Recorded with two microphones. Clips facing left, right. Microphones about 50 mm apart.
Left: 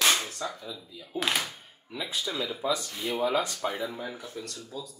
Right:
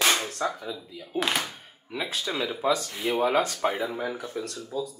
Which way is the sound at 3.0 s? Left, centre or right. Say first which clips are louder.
Right 4 dB; right.